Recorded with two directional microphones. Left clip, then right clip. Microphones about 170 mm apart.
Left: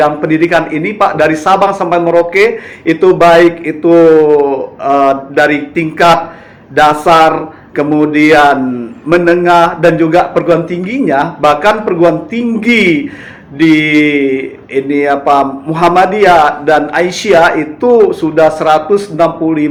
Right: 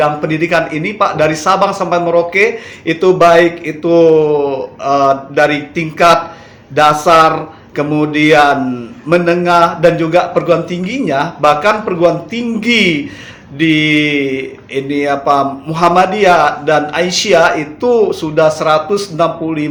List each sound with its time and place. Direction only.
0.0 s mantra: centre (ahead or behind)